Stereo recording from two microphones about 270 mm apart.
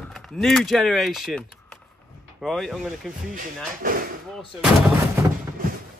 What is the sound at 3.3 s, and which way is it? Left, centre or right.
Speech, right.